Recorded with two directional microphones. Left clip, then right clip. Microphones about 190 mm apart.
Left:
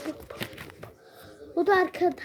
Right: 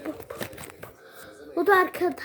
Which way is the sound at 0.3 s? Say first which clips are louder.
Right 1 dB; 15° right (ahead or behind).